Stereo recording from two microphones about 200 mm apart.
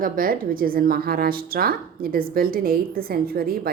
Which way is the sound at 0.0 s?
45° right (ahead or behind).